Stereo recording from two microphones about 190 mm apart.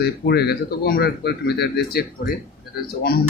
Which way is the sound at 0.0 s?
60° left (ahead or behind).